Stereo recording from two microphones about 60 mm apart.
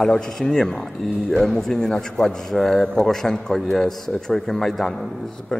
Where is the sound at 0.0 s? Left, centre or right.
Centre.